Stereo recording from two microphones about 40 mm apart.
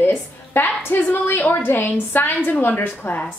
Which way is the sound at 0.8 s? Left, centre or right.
Left.